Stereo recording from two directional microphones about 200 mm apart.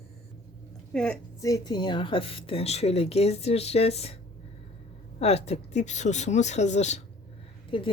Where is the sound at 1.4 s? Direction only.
20° left (ahead or behind).